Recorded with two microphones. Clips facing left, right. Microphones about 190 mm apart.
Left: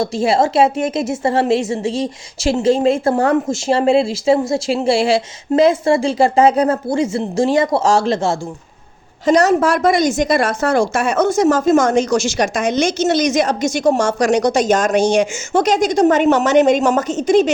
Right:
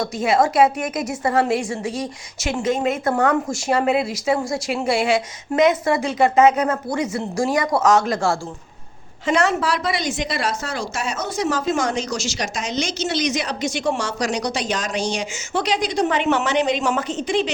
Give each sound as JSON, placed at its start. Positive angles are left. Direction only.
{"t": 0.0, "sound": "speech", "side_deg": 30}
{"t": 9.2, "sound": "a woman's voice", "side_deg": 40}